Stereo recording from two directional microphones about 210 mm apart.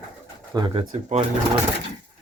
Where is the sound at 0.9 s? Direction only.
35° right (ahead or behind).